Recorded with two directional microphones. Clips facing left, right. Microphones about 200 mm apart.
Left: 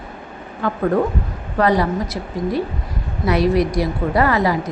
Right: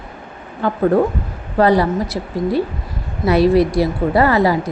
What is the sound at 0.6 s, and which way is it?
Speech, 30° right (ahead or behind).